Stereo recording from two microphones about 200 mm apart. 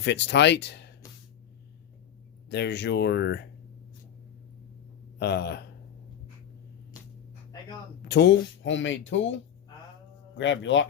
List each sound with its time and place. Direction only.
0.0 s speech: 60° left (ahead or behind)
2.5 s speech: 55° left (ahead or behind)
5.2 s speech: 55° left (ahead or behind)
8.0 s speech: 55° left (ahead or behind)